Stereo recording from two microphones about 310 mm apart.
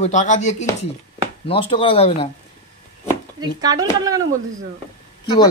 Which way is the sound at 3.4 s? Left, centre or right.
Centre.